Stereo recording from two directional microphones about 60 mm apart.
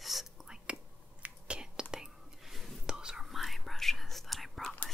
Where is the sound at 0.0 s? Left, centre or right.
Centre.